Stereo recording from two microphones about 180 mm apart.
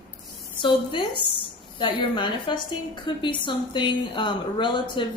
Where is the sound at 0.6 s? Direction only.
25° left (ahead or behind).